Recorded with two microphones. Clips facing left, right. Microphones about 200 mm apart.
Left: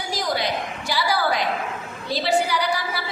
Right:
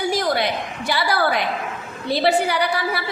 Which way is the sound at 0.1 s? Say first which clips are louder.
Right 4 dB; 60° right (ahead or behind).